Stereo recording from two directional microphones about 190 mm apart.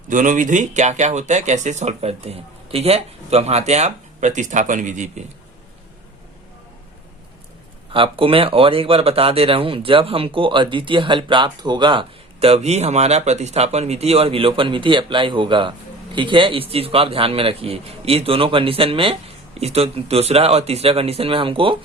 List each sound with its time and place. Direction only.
0.1 s speech: 40° right (ahead or behind)
7.9 s speech: 30° right (ahead or behind)